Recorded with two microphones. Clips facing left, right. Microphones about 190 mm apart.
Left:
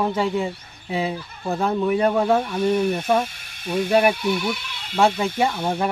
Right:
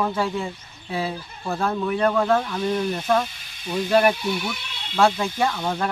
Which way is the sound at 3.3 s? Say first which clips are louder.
Left 2 dB; 60° left (ahead or behind).